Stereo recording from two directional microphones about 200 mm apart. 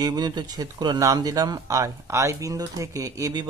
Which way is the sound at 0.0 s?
20° right (ahead or behind).